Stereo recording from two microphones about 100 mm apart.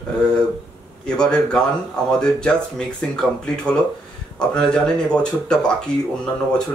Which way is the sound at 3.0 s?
5° left (ahead or behind).